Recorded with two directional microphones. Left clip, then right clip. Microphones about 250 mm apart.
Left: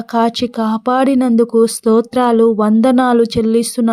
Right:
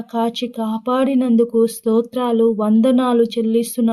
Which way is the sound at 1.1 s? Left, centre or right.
Left.